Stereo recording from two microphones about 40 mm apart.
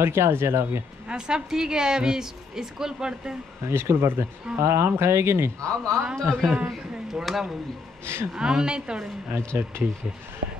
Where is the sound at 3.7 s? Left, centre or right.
Right.